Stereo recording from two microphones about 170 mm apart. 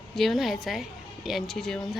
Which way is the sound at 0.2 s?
Centre (ahead or behind).